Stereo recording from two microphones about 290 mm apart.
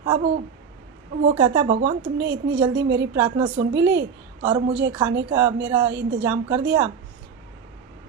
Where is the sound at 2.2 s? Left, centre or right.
Right.